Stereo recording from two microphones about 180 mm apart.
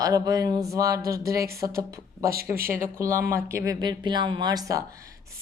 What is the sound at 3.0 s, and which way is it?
Speech, 15° right (ahead or behind).